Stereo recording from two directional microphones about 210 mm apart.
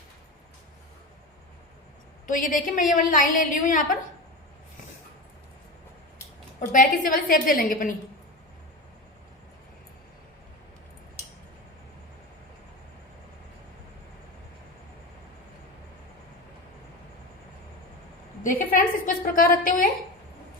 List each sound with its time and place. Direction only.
2.2 s a woman's voice: 40° left (ahead or behind)
6.7 s a woman's voice: 40° left (ahead or behind)
18.4 s a woman's voice: 40° left (ahead or behind)